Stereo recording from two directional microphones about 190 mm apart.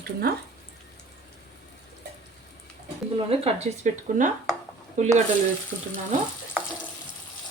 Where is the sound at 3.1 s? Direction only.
30° right (ahead or behind).